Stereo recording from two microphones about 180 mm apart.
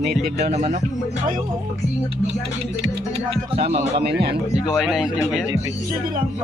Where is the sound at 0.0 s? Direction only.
60° right (ahead or behind).